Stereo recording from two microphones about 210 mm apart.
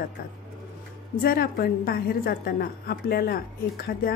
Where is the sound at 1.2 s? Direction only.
45° left (ahead or behind).